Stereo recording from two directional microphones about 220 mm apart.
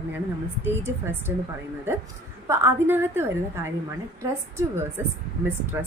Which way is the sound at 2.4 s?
10° right (ahead or behind).